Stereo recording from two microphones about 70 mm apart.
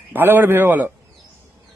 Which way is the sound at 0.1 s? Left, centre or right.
Right.